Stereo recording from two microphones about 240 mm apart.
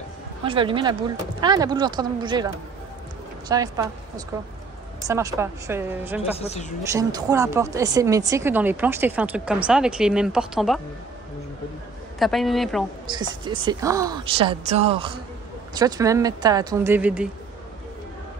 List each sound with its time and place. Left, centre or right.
0.5 s speech: right
5.0 s speech: centre
6.3 s speech: left
6.8 s speech: centre
12.2 s speech: centre
13.0 s a woman's voice: centre